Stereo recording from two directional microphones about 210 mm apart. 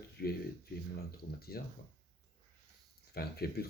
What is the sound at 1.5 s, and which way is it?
Speech, 45° left (ahead or behind).